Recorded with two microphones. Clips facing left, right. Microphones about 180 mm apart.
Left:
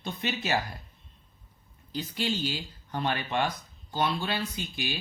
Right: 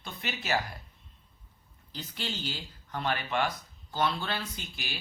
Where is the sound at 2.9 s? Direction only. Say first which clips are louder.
Left 2 dB; 20° left (ahead or behind).